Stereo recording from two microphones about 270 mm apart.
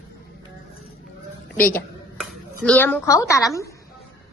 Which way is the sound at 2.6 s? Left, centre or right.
Centre.